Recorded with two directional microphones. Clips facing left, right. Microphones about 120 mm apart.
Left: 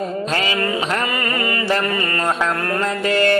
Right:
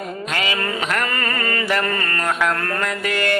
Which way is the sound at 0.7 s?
20° left (ahead or behind).